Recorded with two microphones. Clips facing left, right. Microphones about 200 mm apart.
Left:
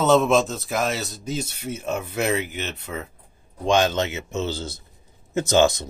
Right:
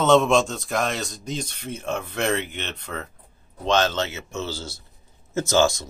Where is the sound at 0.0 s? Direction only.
5° left (ahead or behind).